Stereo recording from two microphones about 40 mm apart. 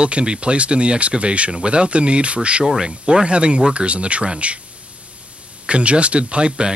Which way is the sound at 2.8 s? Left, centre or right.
Centre.